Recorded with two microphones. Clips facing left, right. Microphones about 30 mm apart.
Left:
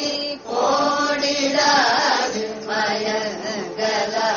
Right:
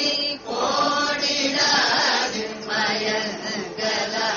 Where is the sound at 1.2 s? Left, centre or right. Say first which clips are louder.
Left 3 dB; centre.